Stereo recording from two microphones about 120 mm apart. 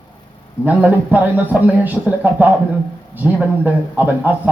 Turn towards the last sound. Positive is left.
turn(degrees=-15)  # may be behind; listen again after turning